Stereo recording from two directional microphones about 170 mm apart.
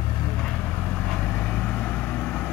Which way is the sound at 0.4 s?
5° left (ahead or behind).